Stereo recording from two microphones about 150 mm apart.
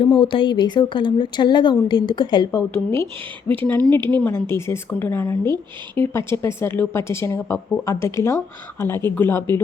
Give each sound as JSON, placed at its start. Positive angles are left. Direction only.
{"t": 0.0, "sound": "a woman's voice", "side_deg": 35}